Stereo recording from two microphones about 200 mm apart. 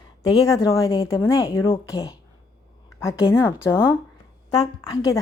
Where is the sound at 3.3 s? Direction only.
15° left (ahead or behind).